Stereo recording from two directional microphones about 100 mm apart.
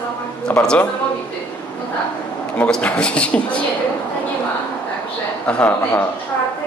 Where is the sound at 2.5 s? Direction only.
15° left (ahead or behind).